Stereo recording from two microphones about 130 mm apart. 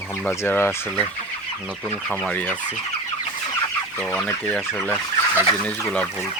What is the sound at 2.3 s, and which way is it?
Speech, 10° left (ahead or behind).